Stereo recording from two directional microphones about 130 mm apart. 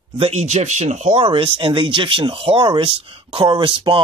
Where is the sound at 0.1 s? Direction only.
50° right (ahead or behind).